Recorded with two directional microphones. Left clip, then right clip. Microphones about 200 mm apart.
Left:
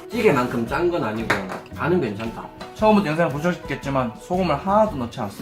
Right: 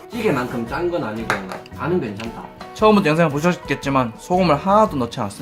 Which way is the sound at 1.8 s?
5° left (ahead or behind).